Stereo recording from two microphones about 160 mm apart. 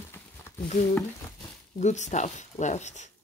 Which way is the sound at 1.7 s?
45° left (ahead or behind).